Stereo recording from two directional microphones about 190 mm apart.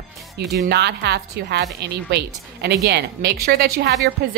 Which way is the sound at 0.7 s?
60° right (ahead or behind).